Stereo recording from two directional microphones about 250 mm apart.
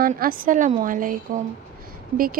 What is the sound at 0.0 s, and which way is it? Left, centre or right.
Speech, right.